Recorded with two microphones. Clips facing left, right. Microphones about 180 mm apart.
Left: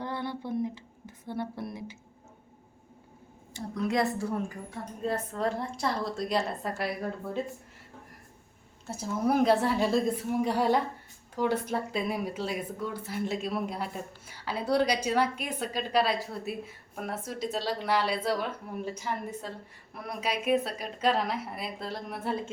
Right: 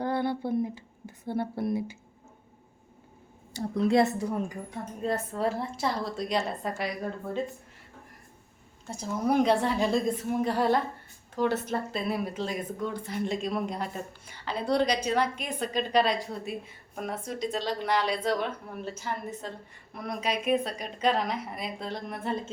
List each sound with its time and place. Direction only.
0.0 s a sound: 30° right (ahead or behind)
1.3 s a woman's voice: 30° right (ahead or behind)
3.5 s a woman's voice: 30° right (ahead or behind)
4.2 s a woman's voice: 15° right (ahead or behind); by 6.9 s centre (ahead or behind)
8.9 s speech: 5° left (ahead or behind)